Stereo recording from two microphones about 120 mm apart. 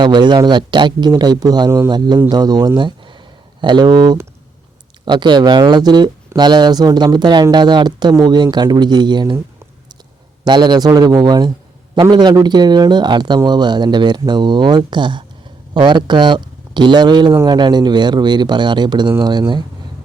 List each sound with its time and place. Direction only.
0.0 s speech: 40° right (ahead or behind)
10.4 s speech: 35° right (ahead or behind)
17.3 s speech: 25° right (ahead or behind)
17.6 s speech: 40° right (ahead or behind)